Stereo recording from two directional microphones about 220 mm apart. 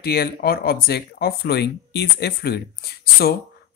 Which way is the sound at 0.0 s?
45° left (ahead or behind).